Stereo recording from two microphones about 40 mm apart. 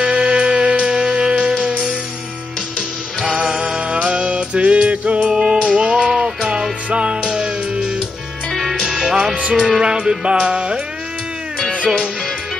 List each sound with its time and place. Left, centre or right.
0.0 s music: right
3.3 s music: right
5.3 s music: centre
9.3 s music: right
9.6 s music: centre